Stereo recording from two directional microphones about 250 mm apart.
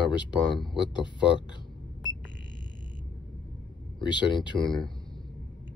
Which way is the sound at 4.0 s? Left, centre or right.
Centre.